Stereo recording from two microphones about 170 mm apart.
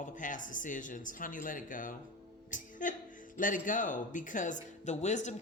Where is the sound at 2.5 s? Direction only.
50° left (ahead or behind).